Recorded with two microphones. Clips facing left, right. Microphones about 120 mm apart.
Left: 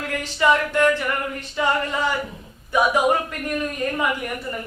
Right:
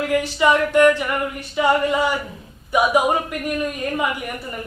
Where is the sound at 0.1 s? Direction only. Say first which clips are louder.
Right 1 dB; 15° right (ahead or behind).